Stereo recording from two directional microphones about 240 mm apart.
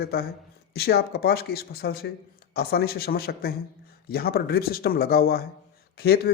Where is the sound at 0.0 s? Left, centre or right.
Left.